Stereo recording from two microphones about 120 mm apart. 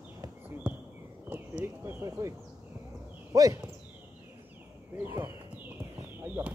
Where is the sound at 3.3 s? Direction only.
30° right (ahead or behind).